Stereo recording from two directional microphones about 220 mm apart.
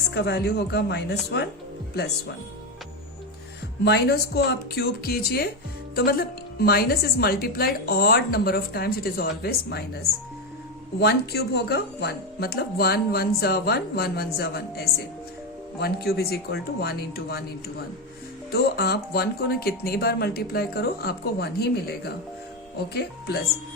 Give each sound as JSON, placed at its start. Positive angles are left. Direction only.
{"t": 0.1, "sound": "speech", "side_deg": 50}
{"t": 3.8, "sound": "speech", "side_deg": 50}
{"t": 11.0, "sound": "speech", "side_deg": 45}
{"t": 18.5, "sound": "speech", "side_deg": 45}